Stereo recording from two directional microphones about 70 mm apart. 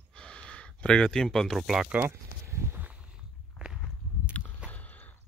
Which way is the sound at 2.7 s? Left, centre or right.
Right.